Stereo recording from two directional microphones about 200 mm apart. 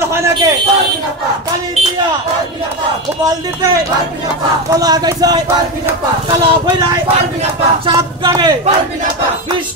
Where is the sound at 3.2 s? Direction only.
15° right (ahead or behind).